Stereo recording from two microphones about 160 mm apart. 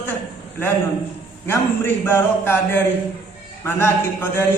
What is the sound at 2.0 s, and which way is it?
Speech, 15° left (ahead or behind).